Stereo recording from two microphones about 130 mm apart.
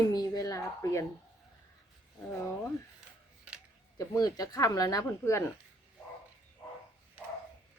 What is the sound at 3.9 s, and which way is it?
Speech, 30° left (ahead or behind).